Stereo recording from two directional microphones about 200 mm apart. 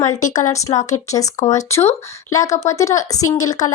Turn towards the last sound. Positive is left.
turn(degrees=15)  # may be behind; listen again after turning